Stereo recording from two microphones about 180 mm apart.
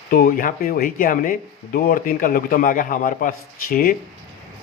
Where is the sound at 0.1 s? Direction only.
50° left (ahead or behind).